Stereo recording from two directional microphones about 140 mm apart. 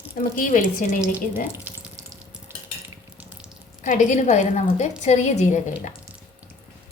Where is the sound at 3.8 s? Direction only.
65° left (ahead or behind).